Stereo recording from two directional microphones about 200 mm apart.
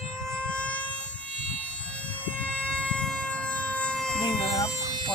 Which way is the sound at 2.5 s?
5° left (ahead or behind).